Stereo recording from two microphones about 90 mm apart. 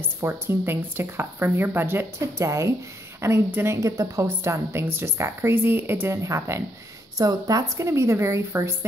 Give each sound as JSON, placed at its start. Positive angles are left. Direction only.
{"t": 0.0, "sound": "a woman's voice", "side_deg": -25}
{"t": 7.2, "sound": "a woman's voice", "side_deg": -45}